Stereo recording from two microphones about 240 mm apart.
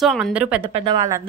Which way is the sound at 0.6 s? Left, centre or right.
Right.